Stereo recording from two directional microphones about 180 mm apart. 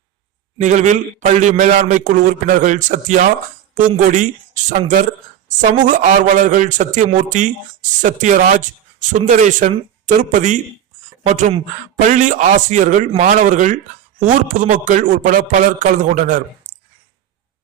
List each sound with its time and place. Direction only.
0.6 s a man's voice: 40° right (ahead or behind)
5.9 s a man's voice: 45° right (ahead or behind)